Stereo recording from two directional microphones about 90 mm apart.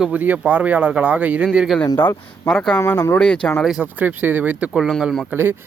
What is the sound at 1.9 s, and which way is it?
Speech, 25° left (ahead or behind).